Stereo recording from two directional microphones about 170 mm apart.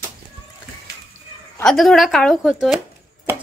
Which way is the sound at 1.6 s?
5° left (ahead or behind).